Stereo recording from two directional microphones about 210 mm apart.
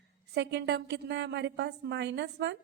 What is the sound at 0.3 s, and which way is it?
A woman's voice, 55° right (ahead or behind).